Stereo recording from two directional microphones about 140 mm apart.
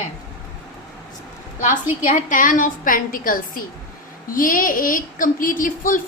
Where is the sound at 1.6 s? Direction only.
60° left (ahead or behind); by 6.0 s 75° left (ahead or behind).